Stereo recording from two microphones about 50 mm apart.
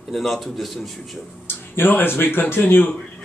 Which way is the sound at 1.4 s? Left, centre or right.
Left.